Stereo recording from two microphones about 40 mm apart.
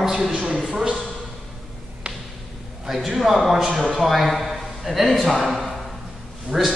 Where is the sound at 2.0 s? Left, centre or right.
Right.